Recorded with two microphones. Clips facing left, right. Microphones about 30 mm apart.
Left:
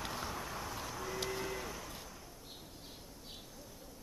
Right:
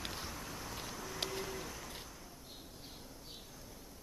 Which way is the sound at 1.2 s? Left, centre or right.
Centre.